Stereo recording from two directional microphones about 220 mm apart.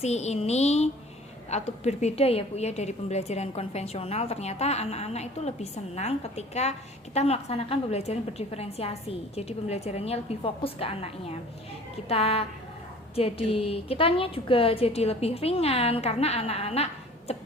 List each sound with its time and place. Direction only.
0.0 s a woman's voice: 30° left (ahead or behind)